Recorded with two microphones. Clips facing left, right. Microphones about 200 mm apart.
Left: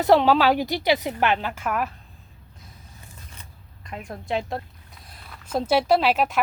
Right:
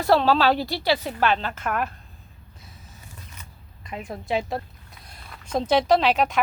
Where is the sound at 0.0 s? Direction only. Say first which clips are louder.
Left 2 dB; 15° left (ahead or behind).